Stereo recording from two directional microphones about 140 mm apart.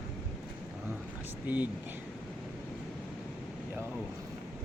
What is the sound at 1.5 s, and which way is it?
Speech, 10° right (ahead or behind).